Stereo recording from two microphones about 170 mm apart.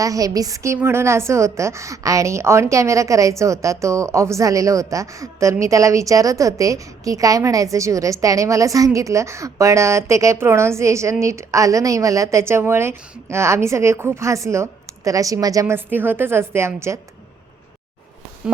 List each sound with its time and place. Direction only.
0.0 s a woman's voice: 20° right (ahead or behind)